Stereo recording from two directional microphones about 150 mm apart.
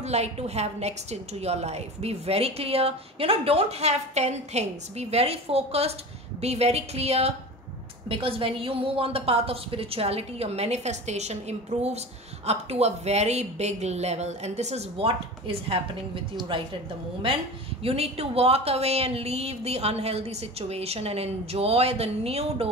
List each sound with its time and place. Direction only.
0.0 s a woman's voice: 45° right (ahead or behind)
17.8 s a woman's voice: 40° right (ahead or behind)